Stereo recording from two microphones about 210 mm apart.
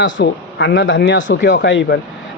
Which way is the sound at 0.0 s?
60° left (ahead or behind).